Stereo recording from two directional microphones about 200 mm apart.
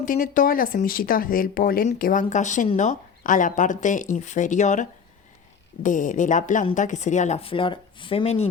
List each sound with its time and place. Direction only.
0.0 s speech: 40° left (ahead or behind)